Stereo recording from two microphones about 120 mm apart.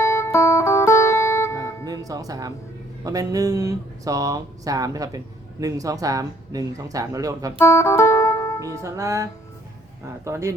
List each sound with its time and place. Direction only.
0.0 s music: 25° left (ahead or behind)
1.8 s music: 30° right (ahead or behind)
3.0 s speech: 30° right (ahead or behind)
7.6 s music: 25° left (ahead or behind)
8.7 s speech: 25° right (ahead or behind)